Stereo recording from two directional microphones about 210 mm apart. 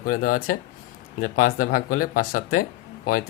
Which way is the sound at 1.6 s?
40° left (ahead or behind).